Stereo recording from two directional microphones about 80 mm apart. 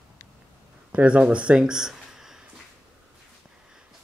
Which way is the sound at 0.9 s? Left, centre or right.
Centre.